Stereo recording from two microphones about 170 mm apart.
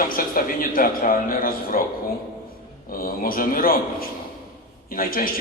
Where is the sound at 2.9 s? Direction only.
60° left (ahead or behind).